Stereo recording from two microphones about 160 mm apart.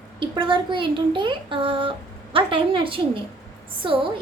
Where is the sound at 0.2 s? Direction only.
30° right (ahead or behind).